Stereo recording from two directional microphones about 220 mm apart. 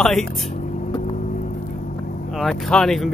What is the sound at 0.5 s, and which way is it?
Vehicle, 35° left (ahead or behind).